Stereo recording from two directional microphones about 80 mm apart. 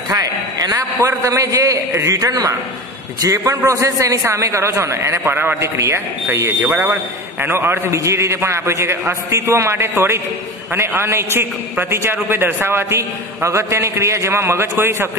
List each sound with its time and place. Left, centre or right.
0.1 s a man's voice: right
6.6 s a man's voice: right